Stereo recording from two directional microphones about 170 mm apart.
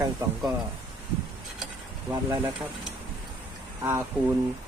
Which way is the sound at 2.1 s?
15° right (ahead or behind).